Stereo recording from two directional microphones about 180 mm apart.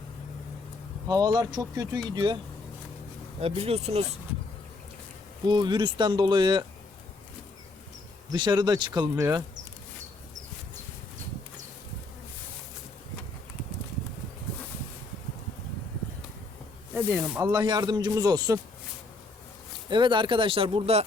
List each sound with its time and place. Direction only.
1.0 s speech: 20° right (ahead or behind)
3.4 s speech: 35° right (ahead or behind)
5.5 s speech: 25° right (ahead or behind)
8.3 s speech: 25° right (ahead or behind)
17.2 s speech: 5° right (ahead or behind)
17.4 s speech: 25° right (ahead or behind)
19.9 s speech: 25° right (ahead or behind)